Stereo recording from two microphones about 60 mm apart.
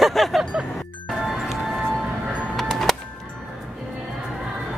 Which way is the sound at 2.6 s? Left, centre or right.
Centre.